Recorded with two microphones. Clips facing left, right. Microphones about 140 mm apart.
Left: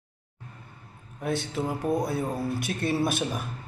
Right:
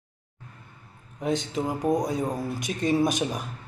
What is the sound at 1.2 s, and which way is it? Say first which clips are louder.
Speech: right 2 dB; 15° right (ahead or behind).